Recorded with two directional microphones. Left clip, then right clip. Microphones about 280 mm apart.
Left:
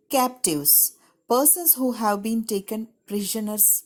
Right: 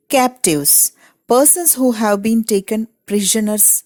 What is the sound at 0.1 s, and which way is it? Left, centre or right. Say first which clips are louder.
Speech: right 8 dB; right.